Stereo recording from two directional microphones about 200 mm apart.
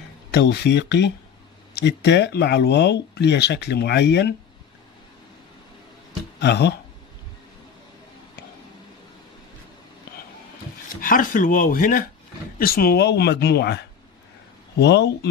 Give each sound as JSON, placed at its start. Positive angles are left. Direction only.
{"t": 0.3, "sound": "speech", "side_deg": 55}
{"t": 6.4, "sound": "speech", "side_deg": 55}
{"t": 11.0, "sound": "speech", "side_deg": 45}